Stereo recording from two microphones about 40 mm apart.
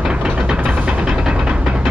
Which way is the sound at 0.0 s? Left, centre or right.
Right.